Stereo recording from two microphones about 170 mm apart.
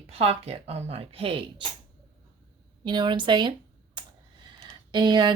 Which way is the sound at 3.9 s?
25° right (ahead or behind).